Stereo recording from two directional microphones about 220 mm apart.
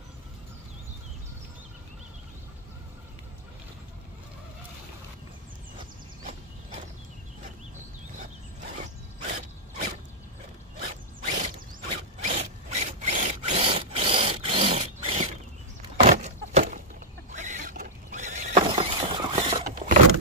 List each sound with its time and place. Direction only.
8.7 s mechanisms: 30° right (ahead or behind)
11.2 s mechanisms: 30° right (ahead or behind)
16.0 s a sound: 30° right (ahead or behind)